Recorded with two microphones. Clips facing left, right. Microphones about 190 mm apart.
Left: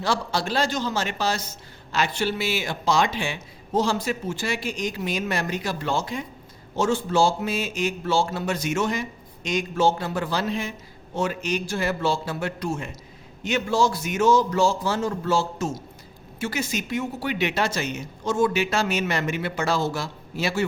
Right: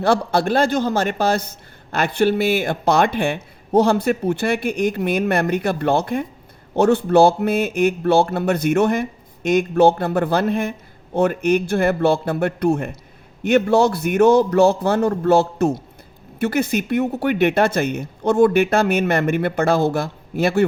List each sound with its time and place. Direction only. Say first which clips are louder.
0.0 s speech: right 8 dB; 55° right (ahead or behind)